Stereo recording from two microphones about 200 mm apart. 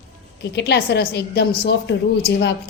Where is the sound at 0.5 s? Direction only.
55° left (ahead or behind).